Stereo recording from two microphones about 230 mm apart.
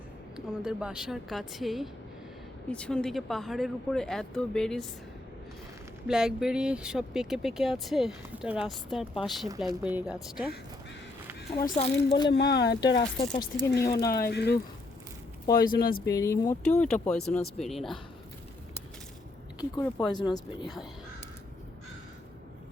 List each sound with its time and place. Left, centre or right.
0.3 s speech: centre
6.1 s speech: centre
11.5 s speech: centre
12.3 s speech: left
13.8 s speech: centre
14.3 s speech: left
16.0 s speech: centre
19.5 s speech: centre